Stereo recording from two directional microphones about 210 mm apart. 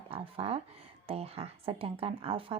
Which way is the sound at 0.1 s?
30° right (ahead or behind).